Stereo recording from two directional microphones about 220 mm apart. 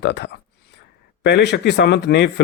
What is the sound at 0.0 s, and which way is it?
Speech, 50° left (ahead or behind).